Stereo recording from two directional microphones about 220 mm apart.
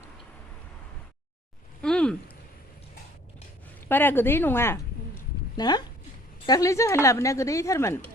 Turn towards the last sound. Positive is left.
turn(degrees=15)  # may be behind; listen again after turning